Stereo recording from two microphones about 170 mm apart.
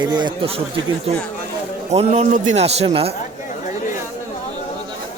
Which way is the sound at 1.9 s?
40° right (ahead or behind).